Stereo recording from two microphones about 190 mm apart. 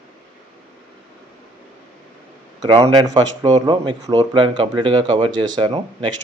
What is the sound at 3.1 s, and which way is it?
Speech, 35° right (ahead or behind).